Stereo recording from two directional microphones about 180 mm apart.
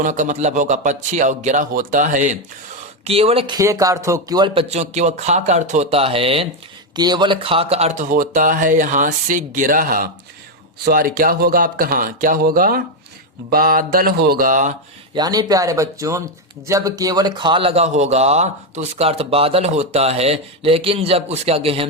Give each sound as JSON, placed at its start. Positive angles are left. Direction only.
{"t": 0.0, "sound": "speech", "side_deg": -45}
{"t": 15.1, "sound": "speech", "side_deg": -20}